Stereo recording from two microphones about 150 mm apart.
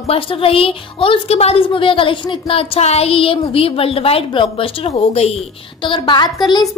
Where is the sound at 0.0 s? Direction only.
40° left (ahead or behind).